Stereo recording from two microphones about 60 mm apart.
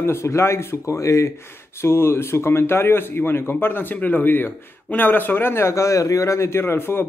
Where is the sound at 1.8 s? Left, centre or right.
Left.